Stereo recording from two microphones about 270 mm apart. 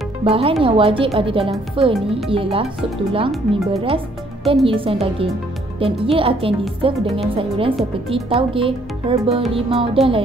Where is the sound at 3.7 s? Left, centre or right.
Right.